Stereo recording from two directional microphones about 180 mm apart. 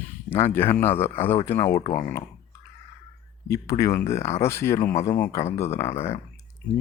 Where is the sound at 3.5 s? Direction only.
15° left (ahead or behind).